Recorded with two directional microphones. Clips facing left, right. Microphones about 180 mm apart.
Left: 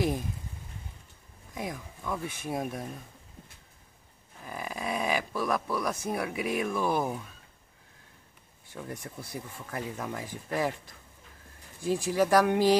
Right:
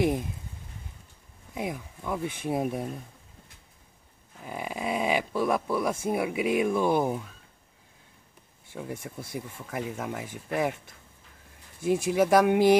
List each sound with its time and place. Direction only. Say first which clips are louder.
0.0 s speech: right 4 dB; 20° right (ahead or behind)
2.0 s speech: right 4 dB; 20° right (ahead or behind)
4.5 s speech: right 3 dB; 20° right (ahead or behind)
8.7 s speech: right 3 dB; 10° right (ahead or behind)
11.8 s speech: right 3 dB; 20° right (ahead or behind)